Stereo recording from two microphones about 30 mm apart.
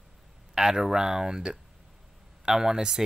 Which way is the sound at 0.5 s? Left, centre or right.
Centre.